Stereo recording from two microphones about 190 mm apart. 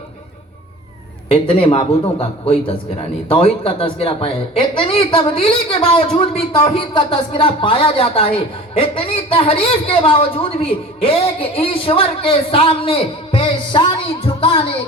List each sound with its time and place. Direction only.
1.3 s speech: 25° left (ahead or behind)